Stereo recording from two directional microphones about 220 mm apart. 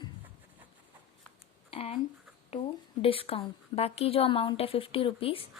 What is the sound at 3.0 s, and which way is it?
A woman's voice, 25° left (ahead or behind).